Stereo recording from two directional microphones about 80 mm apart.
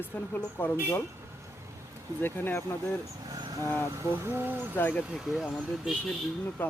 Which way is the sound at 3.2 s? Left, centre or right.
Right.